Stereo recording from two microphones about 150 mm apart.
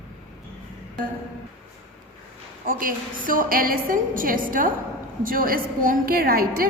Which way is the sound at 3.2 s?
70° right (ahead or behind).